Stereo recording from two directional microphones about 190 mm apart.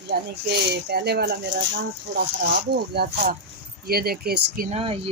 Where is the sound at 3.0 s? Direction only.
60° right (ahead or behind).